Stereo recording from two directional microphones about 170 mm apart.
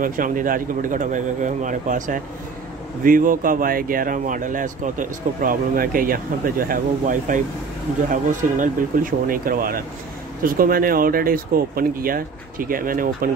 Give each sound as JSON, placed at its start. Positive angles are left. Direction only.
{"t": 0.0, "sound": "speech", "side_deg": -50}